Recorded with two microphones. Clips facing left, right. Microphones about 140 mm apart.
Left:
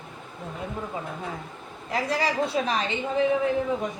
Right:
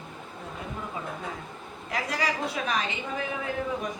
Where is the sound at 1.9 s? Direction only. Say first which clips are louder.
Left 4 dB; 30° left (ahead or behind).